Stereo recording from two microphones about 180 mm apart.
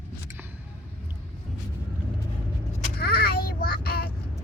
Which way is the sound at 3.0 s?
60° left (ahead or behind).